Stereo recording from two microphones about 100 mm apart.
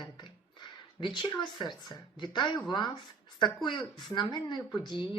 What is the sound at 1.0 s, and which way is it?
Speech, 50° left (ahead or behind).